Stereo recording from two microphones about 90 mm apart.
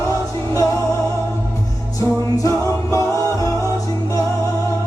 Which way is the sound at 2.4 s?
35° left (ahead or behind).